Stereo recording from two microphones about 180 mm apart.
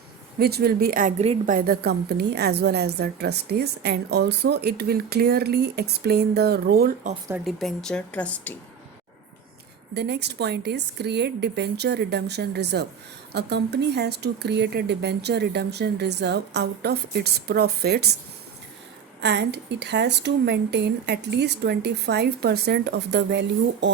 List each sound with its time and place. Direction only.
0.3 s a woman's voice: 60° right (ahead or behind)
1.2 s a woman's voice: 35° right (ahead or behind)
1.5 s a woman's voice: 60° right (ahead or behind)
7.4 s speech: centre (ahead or behind)
9.9 s speech: 70° right (ahead or behind)
19.2 s speech: 70° right (ahead or behind)